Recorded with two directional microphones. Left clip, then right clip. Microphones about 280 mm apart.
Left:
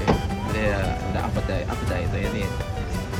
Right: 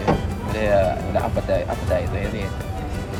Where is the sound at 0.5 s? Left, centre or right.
Centre.